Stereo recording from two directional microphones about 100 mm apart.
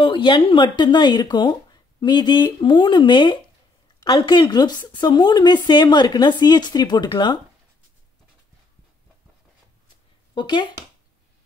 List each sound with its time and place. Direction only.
0.0 s speech: 55° left (ahead or behind)
10.3 s speech: 50° left (ahead or behind)